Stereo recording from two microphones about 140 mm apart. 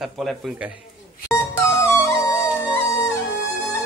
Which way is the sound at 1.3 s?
20° left (ahead or behind).